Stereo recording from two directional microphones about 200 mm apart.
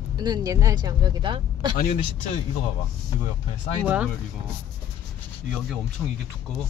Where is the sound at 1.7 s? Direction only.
45° left (ahead or behind).